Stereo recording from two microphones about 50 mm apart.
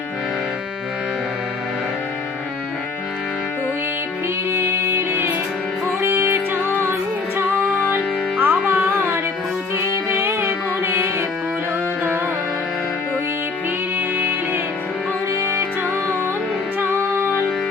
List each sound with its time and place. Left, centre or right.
4.5 s music: right
7.9 s music: right
9.0 s carnatic music: right
9.7 s music: right
14.2 s music: right
16.8 s music: right